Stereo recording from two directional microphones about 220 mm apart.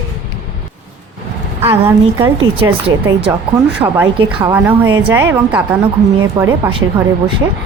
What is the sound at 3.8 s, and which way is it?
A woman's voice, 15° right (ahead or behind).